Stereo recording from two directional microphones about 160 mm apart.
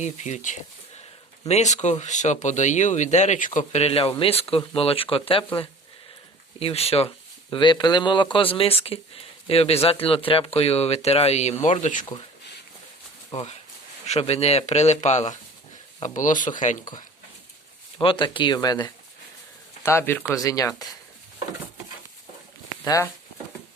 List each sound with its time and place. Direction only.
0.0 s speech: 45° left (ahead or behind)
6.6 s speech: 40° left (ahead or behind)
7.5 s speech: 30° left (ahead or behind)
11.8 s speech: 55° left (ahead or behind)
13.3 s speech: 40° left (ahead or behind)
17.9 s speech: 30° left (ahead or behind)
22.8 s speech: 20° left (ahead or behind)